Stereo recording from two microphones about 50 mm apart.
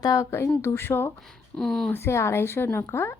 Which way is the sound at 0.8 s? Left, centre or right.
Left.